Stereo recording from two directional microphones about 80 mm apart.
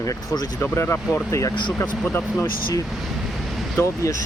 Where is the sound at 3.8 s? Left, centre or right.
Left.